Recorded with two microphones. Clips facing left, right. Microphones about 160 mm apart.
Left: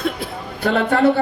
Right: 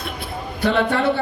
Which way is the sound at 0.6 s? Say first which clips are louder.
Left 3 dB; 45° left (ahead or behind).